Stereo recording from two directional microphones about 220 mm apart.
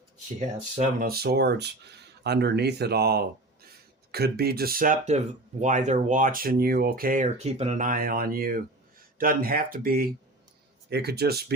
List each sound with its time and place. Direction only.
0.3 s speech: 35° right (ahead or behind)